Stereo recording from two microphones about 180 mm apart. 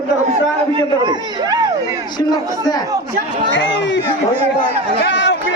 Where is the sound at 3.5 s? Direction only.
85° left.